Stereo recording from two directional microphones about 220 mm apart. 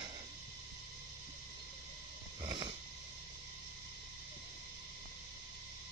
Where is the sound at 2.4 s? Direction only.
20° right (ahead or behind).